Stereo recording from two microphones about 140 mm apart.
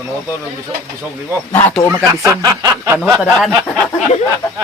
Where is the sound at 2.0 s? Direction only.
25° right (ahead or behind).